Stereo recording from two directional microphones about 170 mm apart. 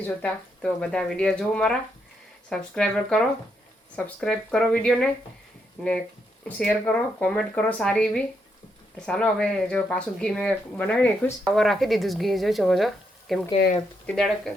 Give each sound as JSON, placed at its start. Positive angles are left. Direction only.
{"t": 0.0, "sound": "speech", "side_deg": 10}
{"t": 6.4, "sound": "speech", "side_deg": 5}